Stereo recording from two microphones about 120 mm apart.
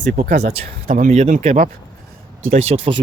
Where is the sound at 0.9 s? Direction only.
80° right.